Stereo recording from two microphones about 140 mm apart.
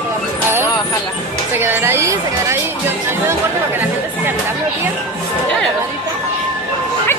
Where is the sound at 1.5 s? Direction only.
15° right (ahead or behind).